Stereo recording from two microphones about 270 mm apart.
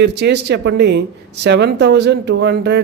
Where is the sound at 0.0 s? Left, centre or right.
Right.